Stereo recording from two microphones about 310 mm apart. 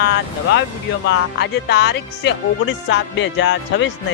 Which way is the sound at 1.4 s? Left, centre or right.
Left.